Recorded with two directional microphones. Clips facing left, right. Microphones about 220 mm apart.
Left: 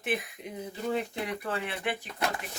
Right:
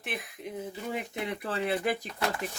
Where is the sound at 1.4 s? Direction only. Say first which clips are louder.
Right 4 dB; 35° right (ahead or behind).